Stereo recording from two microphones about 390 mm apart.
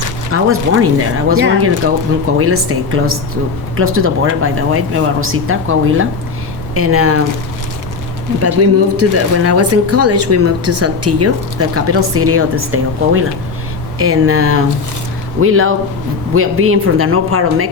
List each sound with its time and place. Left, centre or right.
0.3 s speech: right
8.4 s speech: right